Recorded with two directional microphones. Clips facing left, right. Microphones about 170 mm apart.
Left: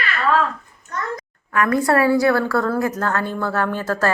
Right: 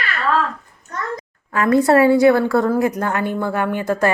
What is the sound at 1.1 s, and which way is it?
A woman's voice, 30° right (ahead or behind).